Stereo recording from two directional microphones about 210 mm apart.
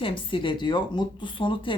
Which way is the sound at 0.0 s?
25° left (ahead or behind).